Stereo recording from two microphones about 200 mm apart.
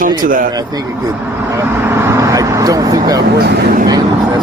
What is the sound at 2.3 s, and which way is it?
Vehicle, 15° right (ahead or behind).